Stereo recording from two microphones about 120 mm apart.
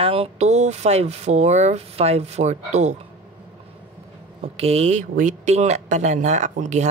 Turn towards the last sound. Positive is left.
turn(degrees=-85)